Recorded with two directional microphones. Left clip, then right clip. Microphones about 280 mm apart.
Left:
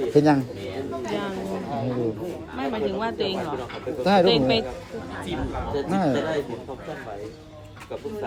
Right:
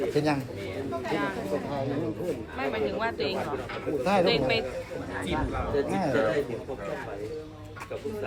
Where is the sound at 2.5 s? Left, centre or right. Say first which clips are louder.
Left 3 dB; centre.